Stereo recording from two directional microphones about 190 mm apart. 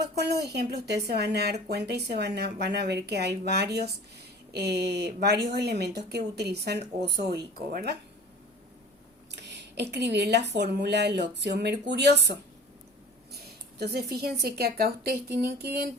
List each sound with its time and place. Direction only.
0.2 s speech: 60° right (ahead or behind)
9.3 s speech: 65° right (ahead or behind)